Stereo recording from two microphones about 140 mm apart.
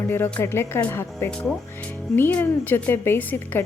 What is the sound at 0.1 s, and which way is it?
A woman's voice, 15° left (ahead or behind).